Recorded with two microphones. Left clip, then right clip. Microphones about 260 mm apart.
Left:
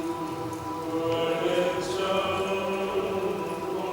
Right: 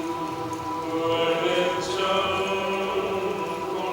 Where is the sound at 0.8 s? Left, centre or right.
Centre.